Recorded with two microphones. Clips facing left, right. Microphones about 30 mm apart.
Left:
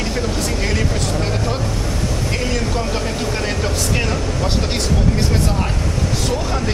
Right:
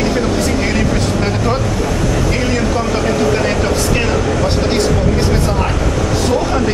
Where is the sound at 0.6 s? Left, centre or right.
Centre.